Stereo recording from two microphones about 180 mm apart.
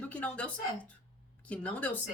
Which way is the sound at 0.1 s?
10° left (ahead or behind).